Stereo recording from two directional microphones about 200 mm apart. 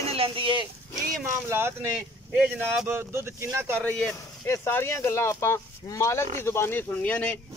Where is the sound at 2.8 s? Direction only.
10° right (ahead or behind).